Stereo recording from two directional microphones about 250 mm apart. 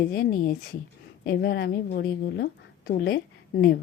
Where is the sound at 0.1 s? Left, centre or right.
Left.